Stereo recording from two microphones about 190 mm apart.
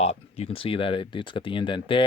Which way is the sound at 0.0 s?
35° left (ahead or behind).